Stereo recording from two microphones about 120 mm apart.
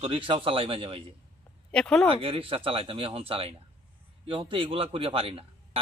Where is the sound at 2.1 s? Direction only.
50° right (ahead or behind).